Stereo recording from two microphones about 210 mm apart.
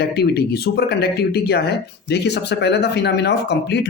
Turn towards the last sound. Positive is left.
turn(degrees=55)  # may be behind; listen again after turning